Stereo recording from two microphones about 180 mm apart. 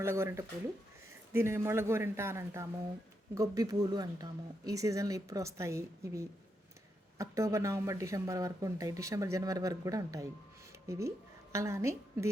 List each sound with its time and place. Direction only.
0.0 s speech: 15° right (ahead or behind)